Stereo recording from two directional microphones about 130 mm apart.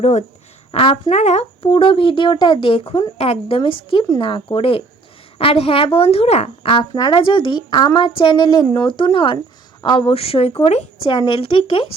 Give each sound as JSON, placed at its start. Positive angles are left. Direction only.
{"t": 0.0, "sound": "speech", "side_deg": 60}
{"t": 0.7, "sound": "speech", "side_deg": 45}
{"t": 1.7, "sound": "speech", "side_deg": 45}